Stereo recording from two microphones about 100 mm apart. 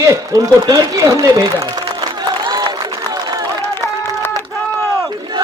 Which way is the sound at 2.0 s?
45° right (ahead or behind).